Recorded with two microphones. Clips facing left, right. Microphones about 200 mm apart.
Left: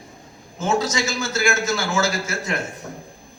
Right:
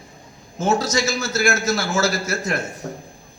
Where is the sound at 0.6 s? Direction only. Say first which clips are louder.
Right 2 dB; 40° right (ahead or behind).